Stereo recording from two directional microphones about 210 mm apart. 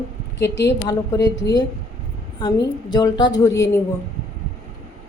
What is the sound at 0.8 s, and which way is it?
A woman's voice, 15° left (ahead or behind).